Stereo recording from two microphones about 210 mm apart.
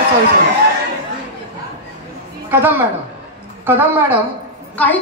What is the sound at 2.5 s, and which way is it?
A man's voice, 10° right (ahead or behind).